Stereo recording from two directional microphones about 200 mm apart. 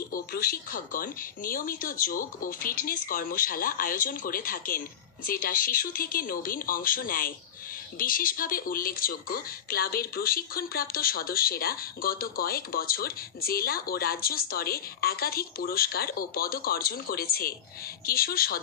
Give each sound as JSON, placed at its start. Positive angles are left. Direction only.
{"t": 0.1, "sound": "speech", "side_deg": 50}